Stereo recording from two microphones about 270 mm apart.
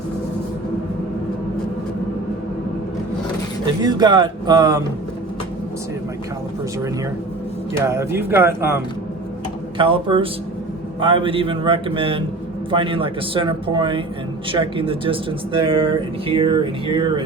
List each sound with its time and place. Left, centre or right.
3.8 s speech: centre
7.7 s speech: centre
9.7 s speech: centre